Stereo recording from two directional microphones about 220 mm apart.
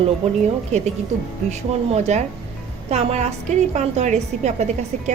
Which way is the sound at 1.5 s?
30° right (ahead or behind).